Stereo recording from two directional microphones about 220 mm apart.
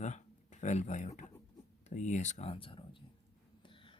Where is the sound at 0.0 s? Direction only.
35° left (ahead or behind).